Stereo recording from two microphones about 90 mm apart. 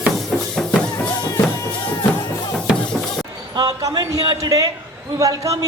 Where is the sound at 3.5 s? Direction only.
45° right (ahead or behind).